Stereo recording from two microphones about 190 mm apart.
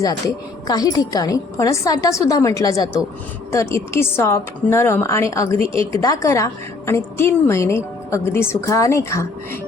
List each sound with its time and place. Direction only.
0.0 s a woman's voice: 20° left (ahead or behind)